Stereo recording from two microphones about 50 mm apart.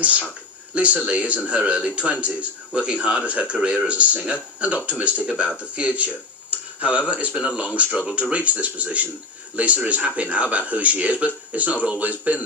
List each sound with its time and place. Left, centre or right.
0.0 s a man's voice: right
6.5 s tick-tock: right
7.3 s a man's voice: centre